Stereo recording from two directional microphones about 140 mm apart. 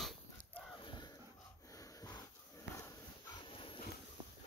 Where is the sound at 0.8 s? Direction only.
35° left (ahead or behind).